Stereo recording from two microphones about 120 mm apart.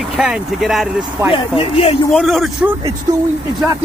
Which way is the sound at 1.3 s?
50° left (ahead or behind).